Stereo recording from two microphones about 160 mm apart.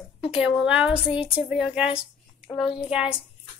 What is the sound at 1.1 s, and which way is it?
Speech, 35° left (ahead or behind).